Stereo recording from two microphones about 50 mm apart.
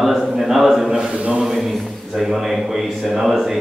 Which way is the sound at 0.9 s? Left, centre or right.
Centre.